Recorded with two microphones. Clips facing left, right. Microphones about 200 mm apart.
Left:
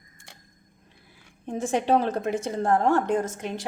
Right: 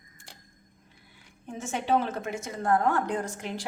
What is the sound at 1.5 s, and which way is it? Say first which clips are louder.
A woman's voice: left 5 dB; 35° left (ahead or behind).